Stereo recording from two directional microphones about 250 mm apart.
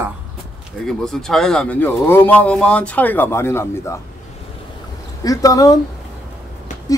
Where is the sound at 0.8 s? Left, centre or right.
Centre.